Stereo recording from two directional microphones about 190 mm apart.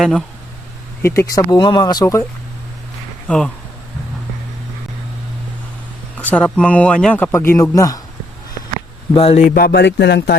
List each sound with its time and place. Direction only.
0.0 s speech: centre (ahead or behind)
1.0 s speech: 15° left (ahead or behind)
3.2 s speech: 5° left (ahead or behind)
6.1 s speech: 10° left (ahead or behind)
9.1 s speech: 30° left (ahead or behind)
9.6 s speech: 55° left (ahead or behind)